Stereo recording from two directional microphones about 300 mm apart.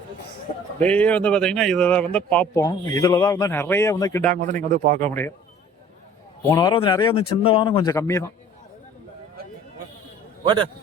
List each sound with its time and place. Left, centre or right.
0.8 s a man's voice: centre
4.3 s a man's voice: right
6.5 s a man's voice: centre
10.4 s a man's voice: centre